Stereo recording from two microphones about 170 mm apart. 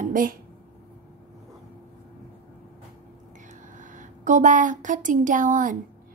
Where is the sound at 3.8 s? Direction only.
50° right (ahead or behind).